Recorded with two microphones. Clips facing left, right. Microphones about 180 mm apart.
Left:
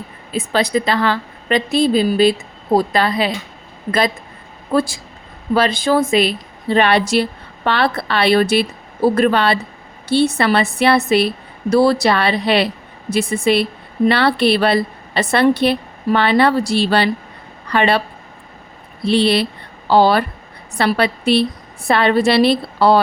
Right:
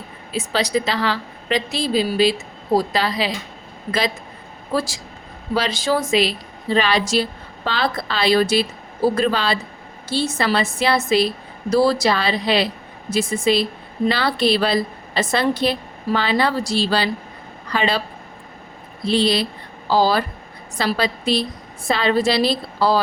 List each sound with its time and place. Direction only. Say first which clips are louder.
0.3 s a woman's voice: left 3 dB; 55° left (ahead or behind)
4.7 s a woman's voice: left 5 dB; 55° left (ahead or behind)
19.0 s a woman's voice: left 4 dB; 65° left (ahead or behind)